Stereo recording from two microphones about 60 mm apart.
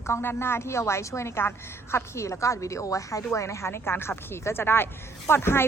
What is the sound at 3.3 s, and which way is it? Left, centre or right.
A woman's voice, left.